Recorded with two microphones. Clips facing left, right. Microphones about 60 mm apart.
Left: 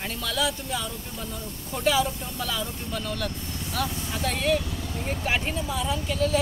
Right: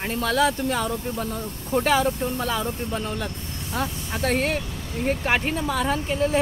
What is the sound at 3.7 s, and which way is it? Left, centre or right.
Speech, right.